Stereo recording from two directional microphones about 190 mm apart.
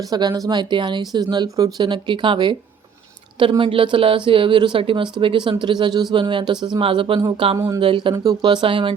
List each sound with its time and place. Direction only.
0.1 s speech: 20° right (ahead or behind)